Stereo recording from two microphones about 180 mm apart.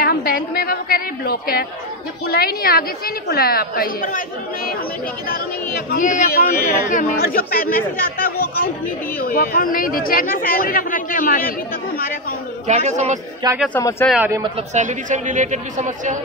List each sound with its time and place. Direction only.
0.0 s a woman's voice: 55° left (ahead or behind)
5.9 s speech: 45° left (ahead or behind)
12.6 s a man's voice: 40° right (ahead or behind)
13.4 s speech: 25° right (ahead or behind)
13.7 s a man's voice: 15° left (ahead or behind)
14.1 s a man's voice: 10° right (ahead or behind)
14.7 s speech: 40° right (ahead or behind)